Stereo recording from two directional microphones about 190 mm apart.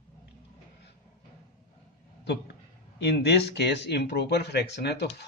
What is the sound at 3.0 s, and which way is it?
A man's voice, 60° left (ahead or behind).